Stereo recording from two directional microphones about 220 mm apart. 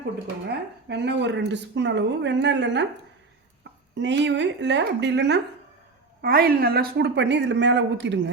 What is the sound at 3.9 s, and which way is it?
A woman's voice, 55° right (ahead or behind).